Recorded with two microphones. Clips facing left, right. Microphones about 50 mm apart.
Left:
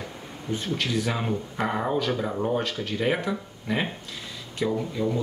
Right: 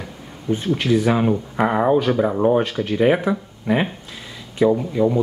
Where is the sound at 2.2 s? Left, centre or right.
Right.